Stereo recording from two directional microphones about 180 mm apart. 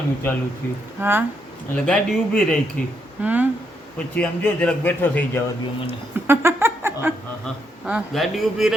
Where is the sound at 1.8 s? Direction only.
5° left (ahead or behind).